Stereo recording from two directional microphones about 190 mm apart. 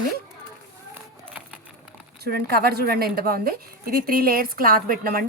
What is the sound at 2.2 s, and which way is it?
A woman's voice, 55° right (ahead or behind).